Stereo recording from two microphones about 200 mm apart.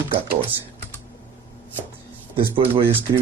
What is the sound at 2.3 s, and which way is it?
Speech, 25° right (ahead or behind).